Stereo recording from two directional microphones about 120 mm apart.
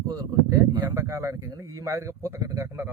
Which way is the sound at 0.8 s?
20° right (ahead or behind).